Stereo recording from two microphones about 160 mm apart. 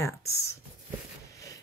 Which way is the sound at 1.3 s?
20° left (ahead or behind).